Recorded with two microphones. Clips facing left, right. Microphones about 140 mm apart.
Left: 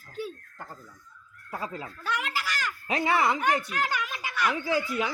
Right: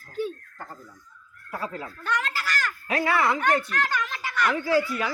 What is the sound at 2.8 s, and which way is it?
Speech, 20° left (ahead or behind).